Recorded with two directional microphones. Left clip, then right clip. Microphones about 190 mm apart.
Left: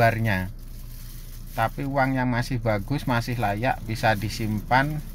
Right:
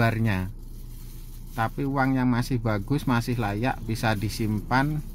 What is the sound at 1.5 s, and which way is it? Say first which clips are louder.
Speech: left 2 dB; 15° right (ahead or behind).